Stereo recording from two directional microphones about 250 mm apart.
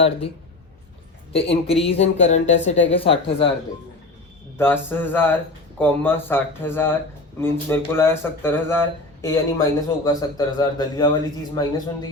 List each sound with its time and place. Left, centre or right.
1.3 s speech: left
4.5 s a man's voice: centre